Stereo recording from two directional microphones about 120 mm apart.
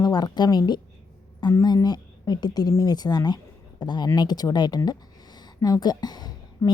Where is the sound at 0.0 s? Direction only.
35° left (ahead or behind).